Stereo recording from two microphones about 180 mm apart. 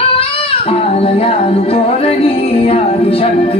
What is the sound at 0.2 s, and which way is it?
Singing, 35° left (ahead or behind).